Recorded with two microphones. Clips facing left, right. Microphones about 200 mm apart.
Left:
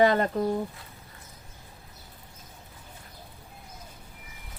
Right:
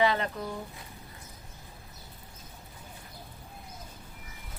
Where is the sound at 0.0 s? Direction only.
45° left (ahead or behind).